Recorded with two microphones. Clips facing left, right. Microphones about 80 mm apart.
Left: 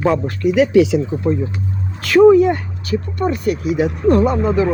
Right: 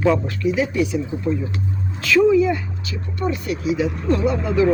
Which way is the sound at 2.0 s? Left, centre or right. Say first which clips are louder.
Left 6 dB; left.